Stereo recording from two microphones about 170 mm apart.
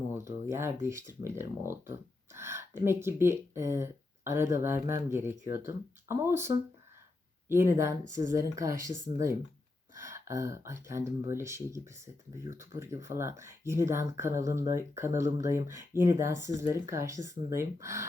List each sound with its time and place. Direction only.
0.2 s speech: 15° right (ahead or behind)